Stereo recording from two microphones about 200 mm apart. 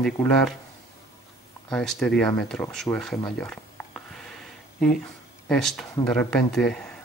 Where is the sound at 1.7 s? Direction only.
Centre (ahead or behind).